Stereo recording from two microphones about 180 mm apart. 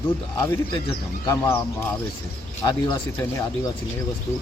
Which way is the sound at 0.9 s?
20° left (ahead or behind).